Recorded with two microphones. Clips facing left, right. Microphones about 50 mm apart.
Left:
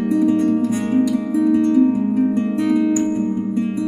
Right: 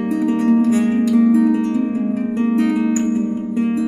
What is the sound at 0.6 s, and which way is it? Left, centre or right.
Music, right.